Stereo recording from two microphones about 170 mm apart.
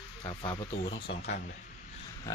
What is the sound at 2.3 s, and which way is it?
Pig, 15° left (ahead or behind).